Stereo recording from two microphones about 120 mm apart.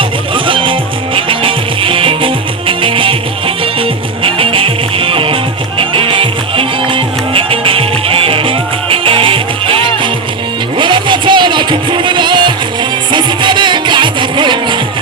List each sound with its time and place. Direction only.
0.3 s music: 45° right (ahead or behind)